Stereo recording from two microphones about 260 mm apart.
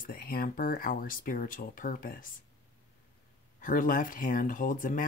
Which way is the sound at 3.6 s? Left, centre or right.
Left.